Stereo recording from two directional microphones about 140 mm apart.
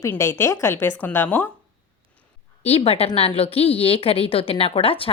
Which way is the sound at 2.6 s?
45° left (ahead or behind).